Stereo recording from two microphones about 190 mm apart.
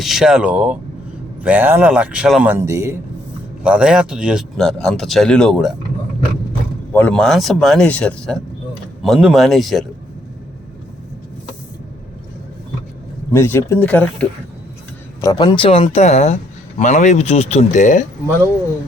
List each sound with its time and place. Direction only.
0.0 s a man's voice: centre (ahead or behind)
6.9 s a man's voice: 5° left (ahead or behind)
13.3 s speech: 15° left (ahead or behind)
15.2 s a man's voice: 20° left (ahead or behind); by 18.0 s 40° left (ahead or behind)